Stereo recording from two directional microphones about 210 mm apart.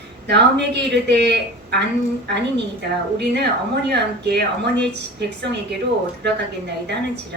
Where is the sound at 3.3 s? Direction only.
50° right (ahead or behind).